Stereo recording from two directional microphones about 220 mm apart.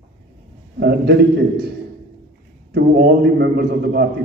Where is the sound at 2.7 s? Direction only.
45° right (ahead or behind).